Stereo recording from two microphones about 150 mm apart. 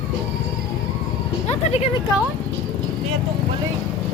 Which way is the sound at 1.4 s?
45° left (ahead or behind).